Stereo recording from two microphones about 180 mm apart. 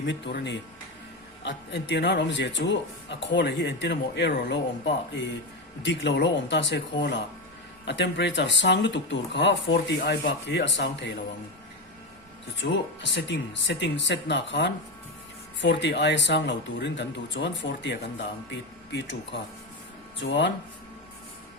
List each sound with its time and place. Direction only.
0.0 s speech: 70° left (ahead or behind)
10.0 s speech: 65° left (ahead or behind)
12.5 s speech: 80° left